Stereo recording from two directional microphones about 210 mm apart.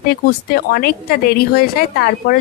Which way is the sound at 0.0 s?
45° left (ahead or behind).